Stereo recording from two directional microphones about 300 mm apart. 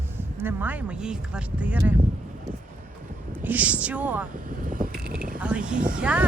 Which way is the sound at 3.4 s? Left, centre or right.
Centre.